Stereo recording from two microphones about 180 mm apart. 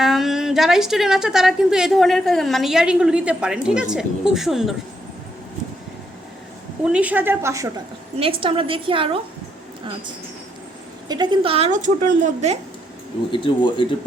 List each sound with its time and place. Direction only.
0.0 s a woman's voice: centre (ahead or behind)
6.8 s a woman's voice: 5° right (ahead or behind)
8.2 s a woman's voice: 30° right (ahead or behind)
11.1 s a woman's voice: 25° right (ahead or behind); by 12.5 s 40° right (ahead or behind)
13.3 s speech: 30° left (ahead or behind)